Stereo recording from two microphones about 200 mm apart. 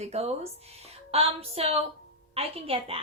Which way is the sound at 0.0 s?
30° right (ahead or behind).